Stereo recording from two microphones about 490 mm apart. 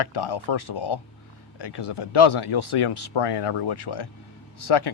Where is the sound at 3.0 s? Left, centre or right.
Left.